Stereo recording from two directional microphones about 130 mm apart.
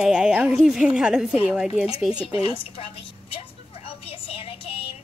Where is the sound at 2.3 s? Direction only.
45° left (ahead or behind).